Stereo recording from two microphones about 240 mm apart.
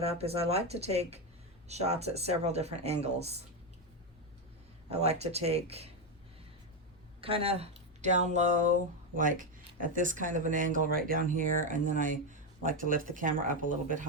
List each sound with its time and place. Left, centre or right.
0.0 s speech: right
4.9 s speech: right
7.2 s speech: right